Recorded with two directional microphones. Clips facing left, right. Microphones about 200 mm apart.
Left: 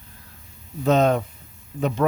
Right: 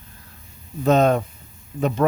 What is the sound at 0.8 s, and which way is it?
Speech, 45° right (ahead or behind).